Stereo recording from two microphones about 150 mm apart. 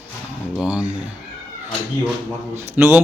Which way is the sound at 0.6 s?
10° right (ahead or behind).